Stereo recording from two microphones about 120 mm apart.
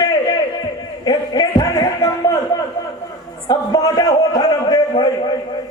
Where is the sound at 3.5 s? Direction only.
30° left (ahead or behind).